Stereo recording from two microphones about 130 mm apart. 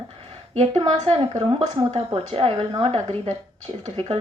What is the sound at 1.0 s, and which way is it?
A woman's voice, 50° right (ahead or behind).